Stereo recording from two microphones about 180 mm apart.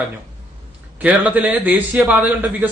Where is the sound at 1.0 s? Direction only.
10° right (ahead or behind).